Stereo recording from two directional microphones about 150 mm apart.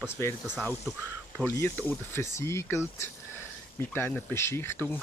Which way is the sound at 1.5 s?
15° left (ahead or behind).